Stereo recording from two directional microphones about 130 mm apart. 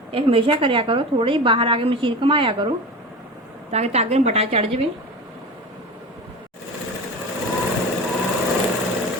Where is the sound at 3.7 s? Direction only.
55° right (ahead or behind).